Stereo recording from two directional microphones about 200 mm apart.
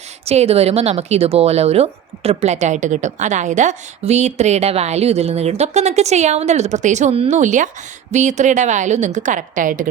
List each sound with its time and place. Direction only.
0.3 s speech: 30° right (ahead or behind)